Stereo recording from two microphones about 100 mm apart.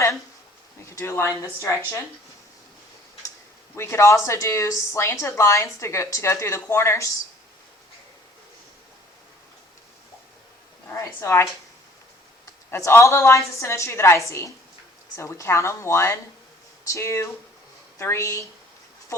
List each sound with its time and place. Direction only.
0.9 s a sound: 25° left (ahead or behind)
1.4 s speech: 30° left (ahead or behind)
3.8 s speech: 30° left (ahead or behind)
10.8 s speech: 30° left (ahead or behind)
12.7 s speech: 25° left (ahead or behind)